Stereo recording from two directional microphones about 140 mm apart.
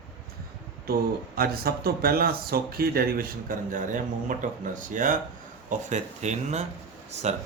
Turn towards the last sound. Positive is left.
turn(degrees=-50)  # may be behind; listen again after turning